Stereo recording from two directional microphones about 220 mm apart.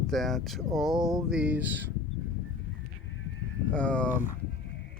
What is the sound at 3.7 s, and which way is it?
Speech, 5° left (ahead or behind).